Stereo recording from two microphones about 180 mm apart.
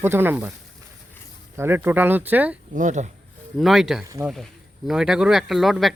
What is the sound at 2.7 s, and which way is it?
Speech, 40° right (ahead or behind).